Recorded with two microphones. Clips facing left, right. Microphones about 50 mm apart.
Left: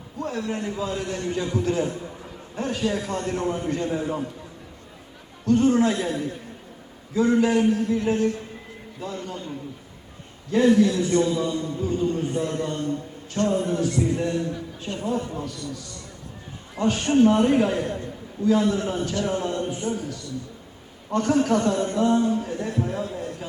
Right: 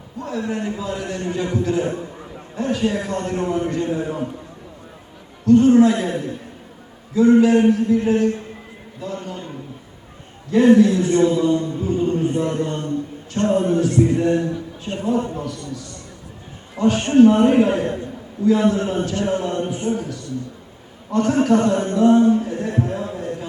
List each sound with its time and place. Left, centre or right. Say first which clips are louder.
0.3 s a man's voice: right 4 dB; right
5.5 s a man's voice: right 7 dB; right
10.5 s a man's voice: right 5 dB; right